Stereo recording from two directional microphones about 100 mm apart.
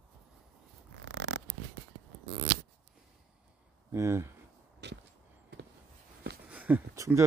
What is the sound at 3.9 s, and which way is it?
Speech, 30° right (ahead or behind).